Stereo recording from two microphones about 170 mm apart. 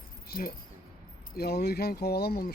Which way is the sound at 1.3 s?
65° left (ahead or behind).